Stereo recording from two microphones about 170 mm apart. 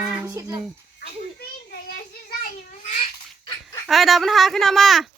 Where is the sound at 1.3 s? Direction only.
65° left (ahead or behind).